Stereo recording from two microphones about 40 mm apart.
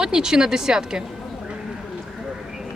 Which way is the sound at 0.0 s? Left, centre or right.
Centre.